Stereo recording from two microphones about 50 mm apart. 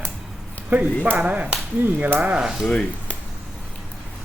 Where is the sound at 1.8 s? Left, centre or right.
Right.